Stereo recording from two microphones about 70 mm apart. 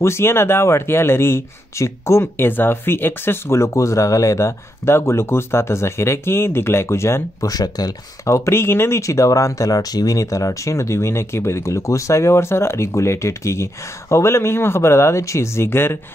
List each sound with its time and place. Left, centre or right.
0.0 s speech: left
7.4 s speech: left
8.3 s speech: left